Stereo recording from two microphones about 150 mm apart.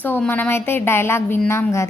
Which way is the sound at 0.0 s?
10° left (ahead or behind).